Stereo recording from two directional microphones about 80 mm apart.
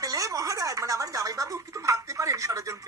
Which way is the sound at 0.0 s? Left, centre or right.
Right.